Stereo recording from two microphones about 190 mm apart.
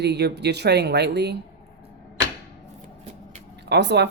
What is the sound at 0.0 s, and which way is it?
Speech, 60° right (ahead or behind).